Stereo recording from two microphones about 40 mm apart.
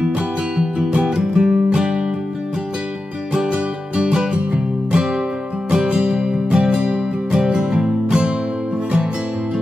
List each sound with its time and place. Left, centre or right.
0.7 s music: right
3.3 s music: right